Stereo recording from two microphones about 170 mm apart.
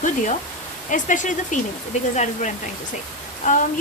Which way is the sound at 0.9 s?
50° left (ahead or behind).